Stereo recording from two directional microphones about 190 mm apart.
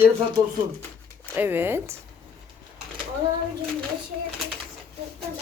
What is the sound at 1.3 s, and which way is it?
Speech, 10° right (ahead or behind).